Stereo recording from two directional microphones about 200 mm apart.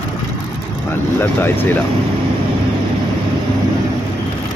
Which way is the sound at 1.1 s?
10° left (ahead or behind).